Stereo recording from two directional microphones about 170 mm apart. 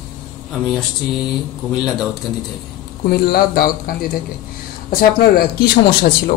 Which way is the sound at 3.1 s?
65° left (ahead or behind).